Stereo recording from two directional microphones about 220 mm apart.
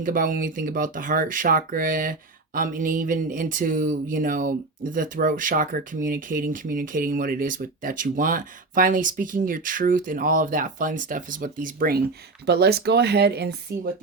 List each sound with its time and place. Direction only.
0.0 s speech: 40° right (ahead or behind)